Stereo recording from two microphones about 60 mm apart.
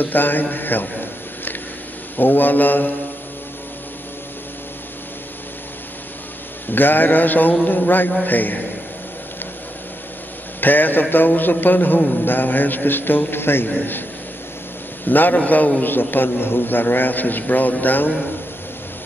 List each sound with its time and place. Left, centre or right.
0.0 s a man's voice: left
2.1 s a man's voice: left
6.7 s a man's voice: left
10.6 s a man's voice: left
15.0 s a man's voice: left